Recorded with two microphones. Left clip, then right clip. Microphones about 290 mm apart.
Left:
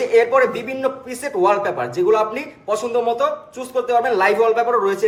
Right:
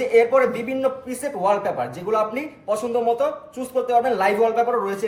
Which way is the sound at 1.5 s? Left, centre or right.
Left.